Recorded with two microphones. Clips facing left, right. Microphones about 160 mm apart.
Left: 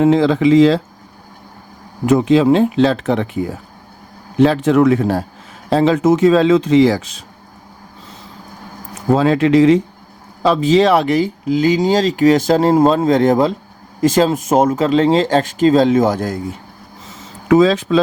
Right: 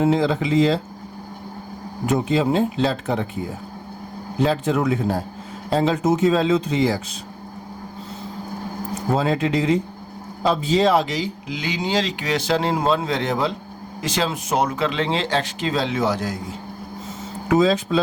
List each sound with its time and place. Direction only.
0.0 s speech: 90° left
2.0 s a man's voice: 90° left
9.1 s speech: 90° left; by 16.4 s 50° left (ahead or behind)
17.5 s speech: 90° left